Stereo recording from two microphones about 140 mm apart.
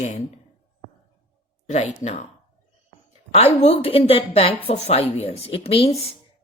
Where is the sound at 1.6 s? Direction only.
55° left (ahead or behind).